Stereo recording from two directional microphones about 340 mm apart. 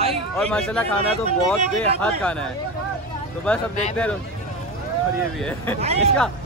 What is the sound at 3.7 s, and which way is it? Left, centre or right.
Speech, centre.